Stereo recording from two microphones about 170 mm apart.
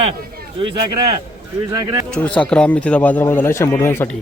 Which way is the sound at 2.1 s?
5° left (ahead or behind).